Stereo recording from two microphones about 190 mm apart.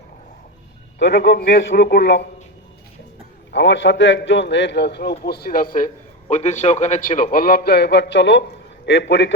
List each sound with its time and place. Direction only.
0.9 s a man's voice: 65° left (ahead or behind)
3.5 s a man's voice: 65° left (ahead or behind)